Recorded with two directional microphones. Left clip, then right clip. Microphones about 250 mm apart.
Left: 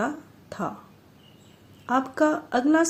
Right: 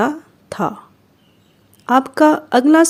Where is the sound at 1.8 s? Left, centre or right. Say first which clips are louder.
Right 10 dB; right.